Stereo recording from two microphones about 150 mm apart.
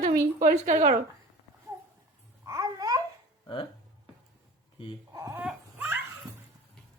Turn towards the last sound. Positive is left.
turn(degrees=-10)  # may be behind; listen again after turning